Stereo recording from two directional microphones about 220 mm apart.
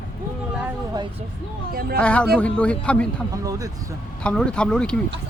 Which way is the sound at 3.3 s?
15° right (ahead or behind).